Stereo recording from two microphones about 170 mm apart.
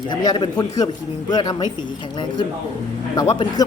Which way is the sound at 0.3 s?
25° left (ahead or behind).